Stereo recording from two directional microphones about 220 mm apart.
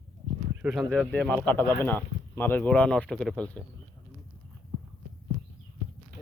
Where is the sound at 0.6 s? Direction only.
Centre (ahead or behind).